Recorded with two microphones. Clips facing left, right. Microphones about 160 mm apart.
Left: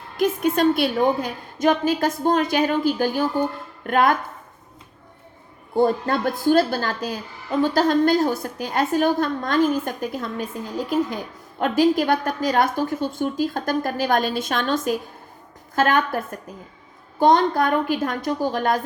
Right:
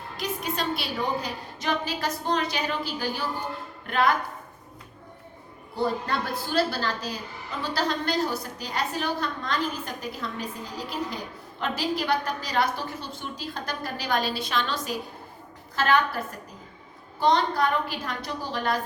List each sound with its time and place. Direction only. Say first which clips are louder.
0.2 s a woman's voice: left 11 dB; 50° left (ahead or behind)
5.7 s a woman's voice: left 8 dB; 50° left (ahead or behind)